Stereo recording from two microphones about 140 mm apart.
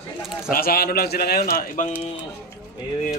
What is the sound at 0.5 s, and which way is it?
A man's voice, 90° left.